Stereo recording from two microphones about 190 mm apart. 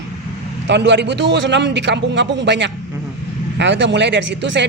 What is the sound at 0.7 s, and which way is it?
Speech, 65° right (ahead or behind).